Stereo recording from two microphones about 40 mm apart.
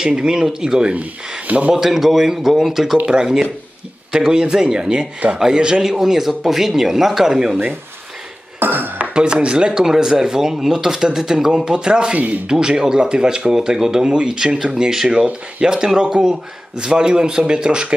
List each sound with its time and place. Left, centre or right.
0.0 s speech: right
1.7 s speech: centre
8.5 s dishes: right
9.1 s speech: right
9.8 s speech: centre